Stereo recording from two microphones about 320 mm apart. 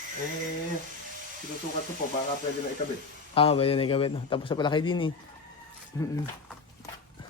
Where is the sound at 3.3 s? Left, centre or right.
Centre.